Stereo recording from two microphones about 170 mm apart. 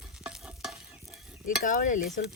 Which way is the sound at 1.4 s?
55° left (ahead or behind).